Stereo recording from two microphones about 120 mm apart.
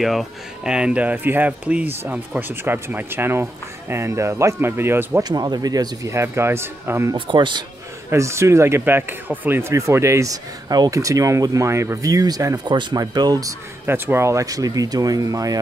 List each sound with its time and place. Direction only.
0.0 s speech: centre (ahead or behind); by 5.2 s 20° right (ahead or behind)
5.3 s speech: 35° right (ahead or behind)
7.2 s speech: 45° right (ahead or behind)
8.1 s speech: 25° right (ahead or behind)
13.8 s speech: 20° right (ahead or behind)